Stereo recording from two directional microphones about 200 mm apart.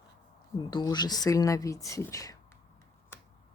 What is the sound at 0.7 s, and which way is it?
Speech, 20° left (ahead or behind).